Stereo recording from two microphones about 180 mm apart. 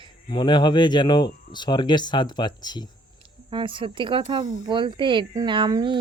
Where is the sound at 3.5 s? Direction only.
30° right (ahead or behind).